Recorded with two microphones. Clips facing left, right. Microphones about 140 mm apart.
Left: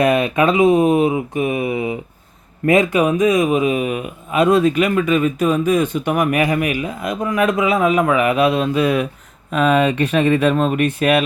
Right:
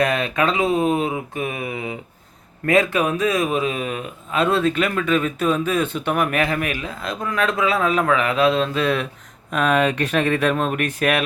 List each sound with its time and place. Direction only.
0.0 s speech: 20° left (ahead or behind); by 11.2 s 5° left (ahead or behind)